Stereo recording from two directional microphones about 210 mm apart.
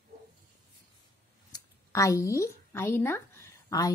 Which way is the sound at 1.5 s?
15° left (ahead or behind).